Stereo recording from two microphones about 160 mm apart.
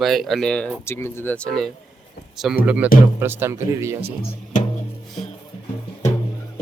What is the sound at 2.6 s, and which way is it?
Speech, 10° right (ahead or behind).